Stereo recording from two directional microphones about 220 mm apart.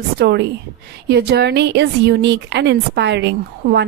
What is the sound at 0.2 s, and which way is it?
Speech, 50° right (ahead or behind).